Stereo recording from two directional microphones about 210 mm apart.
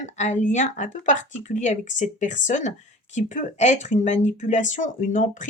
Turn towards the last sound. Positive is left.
turn(degrees=40)  # may be behind; listen again after turning